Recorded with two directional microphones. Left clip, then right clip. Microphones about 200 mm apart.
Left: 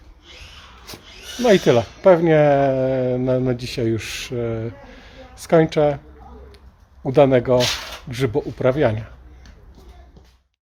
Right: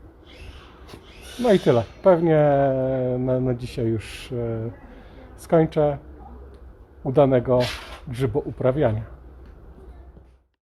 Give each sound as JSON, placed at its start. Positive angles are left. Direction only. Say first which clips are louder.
{"t": 0.9, "sound": "a sound", "louder": "left 7 dB", "side_deg": 25}
{"t": 1.4, "sound": "speech", "louder": "left 4 dB", "side_deg": 5}
{"t": 7.0, "sound": "speech", "louder": "left 3 dB", "side_deg": 5}